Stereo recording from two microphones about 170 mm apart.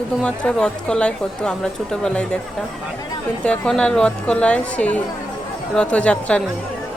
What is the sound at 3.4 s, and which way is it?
A woman's voice, 5° left (ahead or behind).